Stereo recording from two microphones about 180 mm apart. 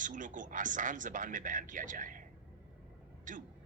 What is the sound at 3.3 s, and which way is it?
Speech, 45° right (ahead or behind).